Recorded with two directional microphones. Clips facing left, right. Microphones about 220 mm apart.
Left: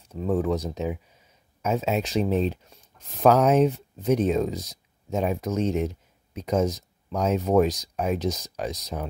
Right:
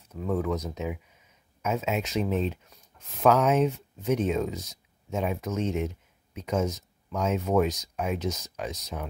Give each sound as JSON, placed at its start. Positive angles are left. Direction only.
{"t": 0.1, "sound": "speech", "side_deg": 30}